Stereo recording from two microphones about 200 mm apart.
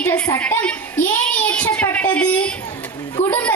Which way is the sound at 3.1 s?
15° left (ahead or behind).